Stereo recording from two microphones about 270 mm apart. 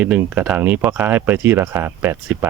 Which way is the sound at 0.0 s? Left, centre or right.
Centre.